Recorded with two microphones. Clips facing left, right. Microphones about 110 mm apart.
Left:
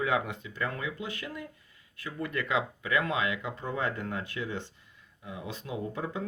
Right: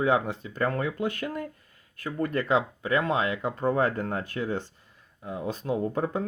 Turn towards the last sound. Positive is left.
turn(degrees=-45)  # may be behind; listen again after turning